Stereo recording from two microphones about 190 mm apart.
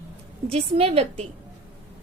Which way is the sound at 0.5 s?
30° right (ahead or behind).